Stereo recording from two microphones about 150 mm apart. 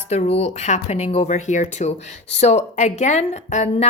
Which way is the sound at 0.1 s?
45° left (ahead or behind).